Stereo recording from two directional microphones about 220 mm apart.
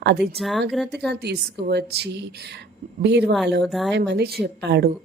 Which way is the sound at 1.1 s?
50° right (ahead or behind).